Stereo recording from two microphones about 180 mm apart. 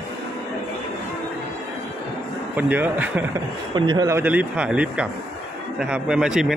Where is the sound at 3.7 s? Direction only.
25° right (ahead or behind); by 6.5 s 5° right (ahead or behind).